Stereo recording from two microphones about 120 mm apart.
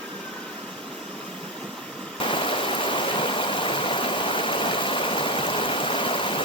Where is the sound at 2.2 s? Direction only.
45° left (ahead or behind).